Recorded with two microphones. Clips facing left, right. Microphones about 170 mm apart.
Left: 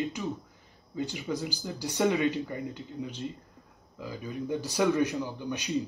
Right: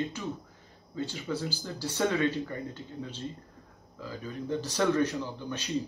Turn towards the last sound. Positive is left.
turn(degrees=15)  # may be behind; listen again after turning